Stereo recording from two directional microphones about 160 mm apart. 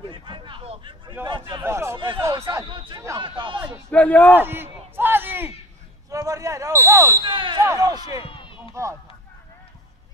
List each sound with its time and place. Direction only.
0.1 s a sound: 30° right (ahead or behind)
1.2 s speech: 25° right (ahead or behind)
1.6 s speech: 15° right (ahead or behind)
2.7 s speech: 30° right (ahead or behind)
3.2 s a sound: 30° right (ahead or behind)
3.9 s a man's voice: 10° left (ahead or behind)
4.4 s a sound: 15° right (ahead or behind)
6.0 s speech: 20° right (ahead or behind)
7.2 s basketball bounce: 30° right (ahead or behind)
7.5 s speech: 20° right (ahead or behind)
8.2 s run: 35° left (ahead or behind)